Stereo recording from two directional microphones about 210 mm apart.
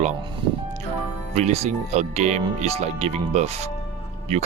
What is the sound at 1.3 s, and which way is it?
Speech, 30° right (ahead or behind).